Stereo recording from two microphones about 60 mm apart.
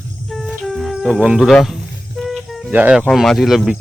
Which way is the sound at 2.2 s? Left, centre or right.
Centre.